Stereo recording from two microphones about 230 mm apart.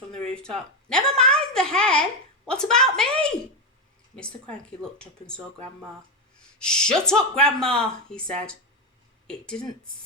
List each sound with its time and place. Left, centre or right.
0.1 s a woman's voice: centre
6.6 s speech: centre